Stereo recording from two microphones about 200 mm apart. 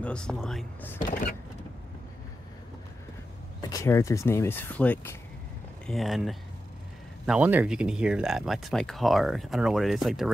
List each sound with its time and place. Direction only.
0.0 s speech: 5° left (ahead or behind)
1.0 s power windows: 45° left (ahead or behind)
3.6 s speech: 15° left (ahead or behind); by 10.3 s centre (ahead or behind)